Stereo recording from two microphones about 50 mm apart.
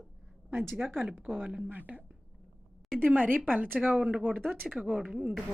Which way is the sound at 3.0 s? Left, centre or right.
Right.